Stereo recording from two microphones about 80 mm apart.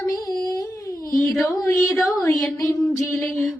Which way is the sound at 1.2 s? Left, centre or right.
Centre.